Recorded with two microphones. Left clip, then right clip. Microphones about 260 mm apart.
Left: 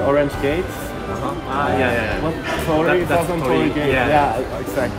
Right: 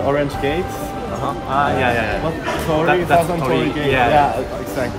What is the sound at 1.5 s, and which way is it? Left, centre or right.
A man's voice, centre.